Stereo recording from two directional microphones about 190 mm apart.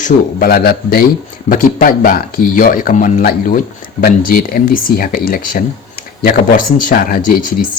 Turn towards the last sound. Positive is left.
turn(degrees=50)  # may be behind; listen again after turning